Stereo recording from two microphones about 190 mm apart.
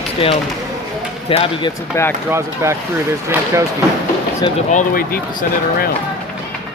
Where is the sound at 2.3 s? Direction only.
15° right (ahead or behind).